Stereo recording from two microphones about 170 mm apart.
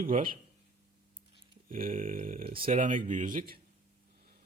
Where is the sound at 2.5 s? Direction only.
55° right (ahead or behind).